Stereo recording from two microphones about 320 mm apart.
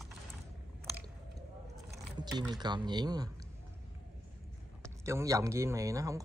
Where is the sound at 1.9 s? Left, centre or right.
Centre.